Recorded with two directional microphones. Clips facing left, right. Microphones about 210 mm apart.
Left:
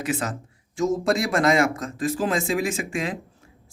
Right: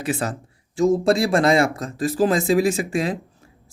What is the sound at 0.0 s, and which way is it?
Speech, 35° right (ahead or behind).